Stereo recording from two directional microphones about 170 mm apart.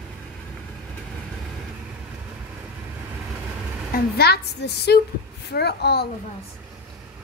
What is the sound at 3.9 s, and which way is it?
A woman's voice, 70° left (ahead or behind).